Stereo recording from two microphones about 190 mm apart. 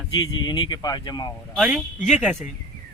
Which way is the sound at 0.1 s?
25° left (ahead or behind).